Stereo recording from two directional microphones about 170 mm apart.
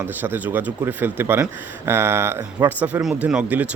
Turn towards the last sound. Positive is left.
turn(degrees=-10)  # may be behind; listen again after turning